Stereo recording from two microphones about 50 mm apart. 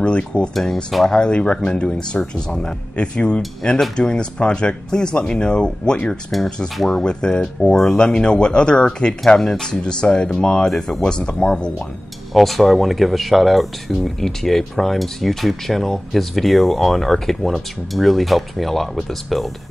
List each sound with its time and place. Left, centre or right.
0.0 s speech: left
6.8 s speech: centre
7.7 s speech: centre
12.4 s speech: centre